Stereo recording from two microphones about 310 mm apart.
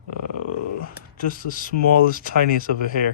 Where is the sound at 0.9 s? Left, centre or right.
Left.